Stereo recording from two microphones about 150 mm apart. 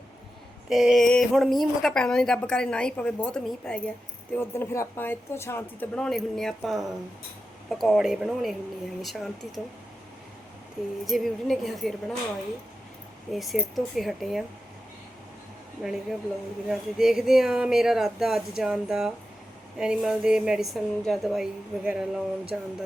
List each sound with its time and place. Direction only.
0.7 s a woman's voice: centre (ahead or behind)
4.4 s a woman's voice: 15° left (ahead or behind); by 9.3 s centre (ahead or behind)
11.0 s a woman's voice: centre (ahead or behind)
13.3 s a woman's voice: centre (ahead or behind)
15.8 s a woman's voice: centre (ahead or behind)